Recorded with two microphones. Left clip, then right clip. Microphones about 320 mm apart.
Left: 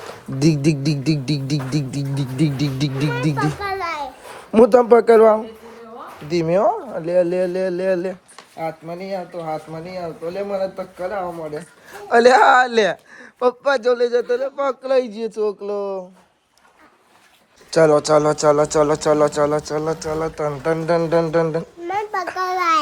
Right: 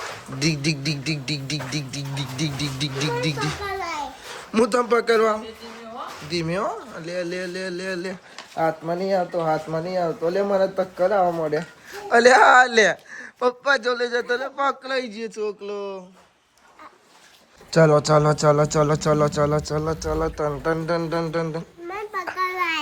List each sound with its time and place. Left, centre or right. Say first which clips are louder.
0.3 s a child's voice: left 6 dB; centre
9.1 s speech: right 4 dB; right
10.2 s speech: right 1 dB; centre
12.0 s speech: left 2 dB; centre
18.1 s speech: left 3 dB; centre